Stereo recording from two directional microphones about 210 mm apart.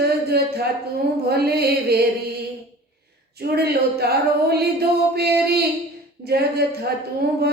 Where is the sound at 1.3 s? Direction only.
50° right (ahead or behind).